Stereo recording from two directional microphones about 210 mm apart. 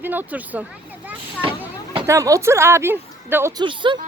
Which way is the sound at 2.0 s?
15° right (ahead or behind).